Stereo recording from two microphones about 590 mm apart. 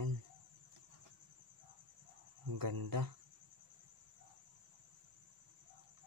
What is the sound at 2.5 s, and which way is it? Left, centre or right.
Speech, right.